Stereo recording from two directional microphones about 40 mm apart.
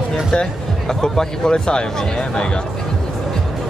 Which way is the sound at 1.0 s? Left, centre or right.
Centre.